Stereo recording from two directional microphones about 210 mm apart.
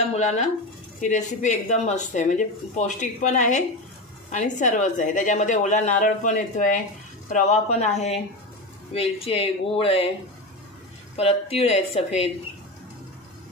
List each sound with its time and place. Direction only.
0.1 s dishes: 35° left (ahead or behind)
1.0 s speech: 35° left (ahead or behind)
8.9 s speech: 30° left (ahead or behind)
11.1 s speech: 30° left (ahead or behind)